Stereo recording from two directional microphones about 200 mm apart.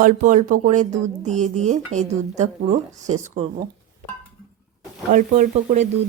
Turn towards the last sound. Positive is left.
turn(degrees=-35)  # may be behind; listen again after turning